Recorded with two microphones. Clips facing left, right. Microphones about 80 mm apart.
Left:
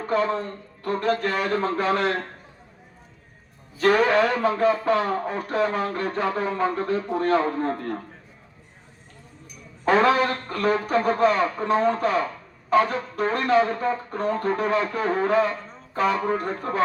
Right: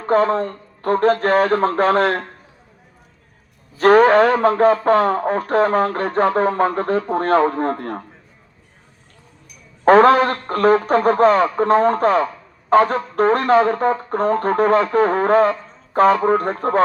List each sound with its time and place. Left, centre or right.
0.1 s speech: right
3.8 s speech: right
9.8 s speech: right